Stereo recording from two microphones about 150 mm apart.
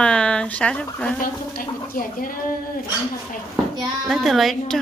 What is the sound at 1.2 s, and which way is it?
Speech, 70° left (ahead or behind).